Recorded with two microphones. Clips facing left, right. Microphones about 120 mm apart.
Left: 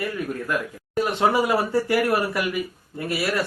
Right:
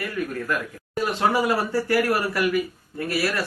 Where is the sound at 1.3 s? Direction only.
25° left (ahead or behind).